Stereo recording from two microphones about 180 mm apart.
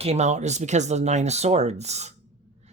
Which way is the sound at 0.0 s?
35° right (ahead or behind).